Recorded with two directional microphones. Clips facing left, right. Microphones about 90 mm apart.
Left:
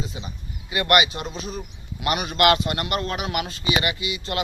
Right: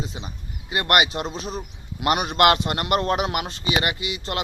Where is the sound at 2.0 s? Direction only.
60° right (ahead or behind).